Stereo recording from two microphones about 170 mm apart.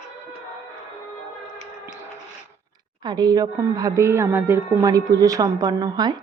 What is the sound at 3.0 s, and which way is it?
A woman's voice, 25° right (ahead or behind).